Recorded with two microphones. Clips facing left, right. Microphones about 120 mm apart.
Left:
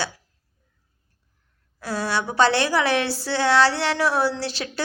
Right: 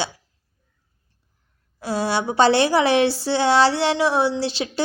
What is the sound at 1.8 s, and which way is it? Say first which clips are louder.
A woman's voice: right 3 dB; 25° right (ahead or behind).